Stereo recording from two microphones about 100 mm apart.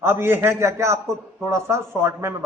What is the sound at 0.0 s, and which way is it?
Speech, 25° right (ahead or behind).